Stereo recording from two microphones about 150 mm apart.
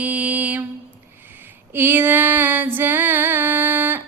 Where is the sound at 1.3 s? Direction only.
15° right (ahead or behind).